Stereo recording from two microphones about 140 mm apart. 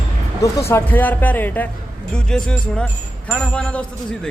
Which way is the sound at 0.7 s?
10° left (ahead or behind).